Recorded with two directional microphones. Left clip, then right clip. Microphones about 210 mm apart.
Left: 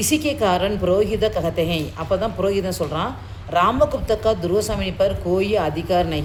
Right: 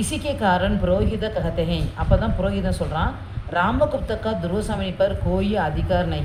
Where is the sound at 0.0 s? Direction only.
50° left (ahead or behind).